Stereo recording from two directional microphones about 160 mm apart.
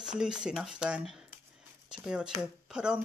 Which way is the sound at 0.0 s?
5° right (ahead or behind).